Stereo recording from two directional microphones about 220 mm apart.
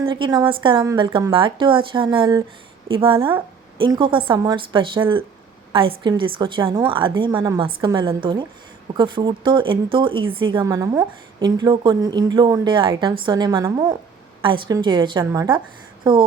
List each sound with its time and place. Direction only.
0.0 s a woman's voice: 20° right (ahead or behind)
3.2 s a woman's voice: 10° right (ahead or behind)